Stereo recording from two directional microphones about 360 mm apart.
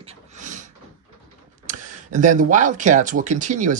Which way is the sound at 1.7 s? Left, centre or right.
Right.